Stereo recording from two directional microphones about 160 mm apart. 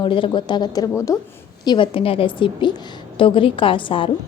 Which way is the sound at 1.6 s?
30° left (ahead or behind).